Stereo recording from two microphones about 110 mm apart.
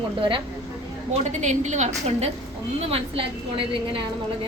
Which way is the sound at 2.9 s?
60° right (ahead or behind).